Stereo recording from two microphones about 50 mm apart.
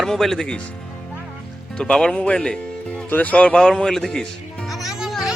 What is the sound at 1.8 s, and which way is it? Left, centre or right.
Speech, centre.